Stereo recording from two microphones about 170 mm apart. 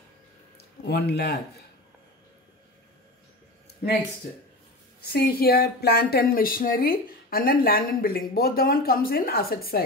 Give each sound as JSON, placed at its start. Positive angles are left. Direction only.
{"t": 0.6, "sound": "a man's voice", "side_deg": 70}
{"t": 5.0, "sound": "speech", "side_deg": 65}